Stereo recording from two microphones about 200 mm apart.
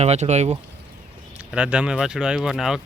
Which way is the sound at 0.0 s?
35° right (ahead or behind).